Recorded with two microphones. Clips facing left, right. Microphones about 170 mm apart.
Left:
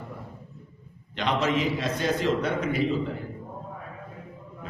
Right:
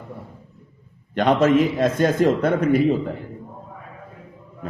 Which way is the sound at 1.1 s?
50° right (ahead or behind).